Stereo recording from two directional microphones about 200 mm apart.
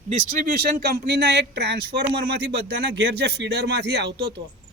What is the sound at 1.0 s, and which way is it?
Speech, 60° right (ahead or behind).